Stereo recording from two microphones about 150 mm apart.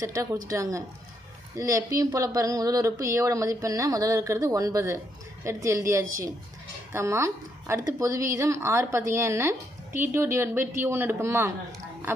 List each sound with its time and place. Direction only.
0.0 s speech: 20° right (ahead or behind)